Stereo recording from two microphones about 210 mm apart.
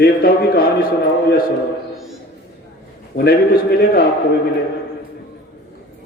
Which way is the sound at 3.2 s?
50° left (ahead or behind).